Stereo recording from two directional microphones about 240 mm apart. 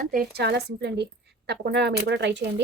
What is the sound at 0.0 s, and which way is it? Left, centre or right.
A woman's voice, right.